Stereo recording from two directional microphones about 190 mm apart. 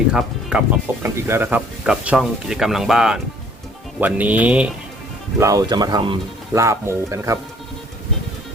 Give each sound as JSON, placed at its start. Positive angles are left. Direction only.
{"t": 0.1, "sound": "speech", "side_deg": -5}
{"t": 5.4, "sound": "speech", "side_deg": -20}